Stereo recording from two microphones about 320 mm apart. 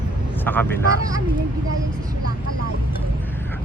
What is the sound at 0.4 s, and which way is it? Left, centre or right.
Speech, centre.